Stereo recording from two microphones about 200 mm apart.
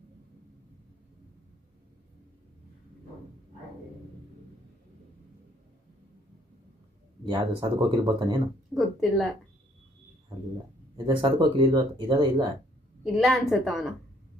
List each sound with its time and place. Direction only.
7.3 s speech: 20° right (ahead or behind)
8.7 s a woman's voice: centre (ahead or behind)
10.9 s speech: 25° right (ahead or behind)
13.1 s a woman's voice: centre (ahead or behind)